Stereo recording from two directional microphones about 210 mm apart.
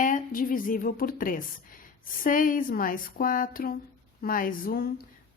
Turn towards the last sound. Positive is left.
turn(degrees=45)  # may be behind; listen again after turning